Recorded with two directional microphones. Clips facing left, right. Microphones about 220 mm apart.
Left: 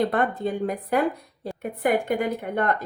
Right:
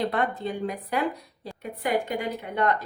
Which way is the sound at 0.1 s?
50° left (ahead or behind).